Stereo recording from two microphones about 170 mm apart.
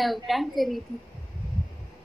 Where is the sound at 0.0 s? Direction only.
Centre (ahead or behind).